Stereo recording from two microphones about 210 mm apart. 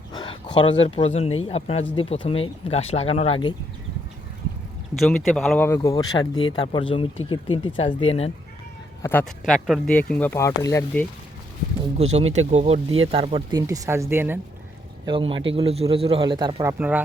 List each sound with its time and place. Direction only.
0.1 s speech: 20° left (ahead or behind)
4.9 s speech: centre (ahead or behind)
5.6 s speech: 15° left (ahead or behind)
9.0 s speech: 15° left (ahead or behind)
9.4 s speech: centre (ahead or behind); by 11.0 s 15° left (ahead or behind)
11.9 s speech: 30° right (ahead or behind); by 14.3 s 10° right (ahead or behind)
15.0 s speech: 25° right (ahead or behind); by 17.0 s 10° right (ahead or behind)